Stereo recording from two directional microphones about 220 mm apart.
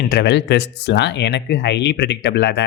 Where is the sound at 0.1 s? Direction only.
50° left (ahead or behind).